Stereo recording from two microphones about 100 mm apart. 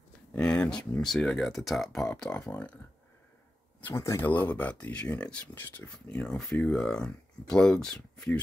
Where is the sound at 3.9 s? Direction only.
30° left (ahead or behind).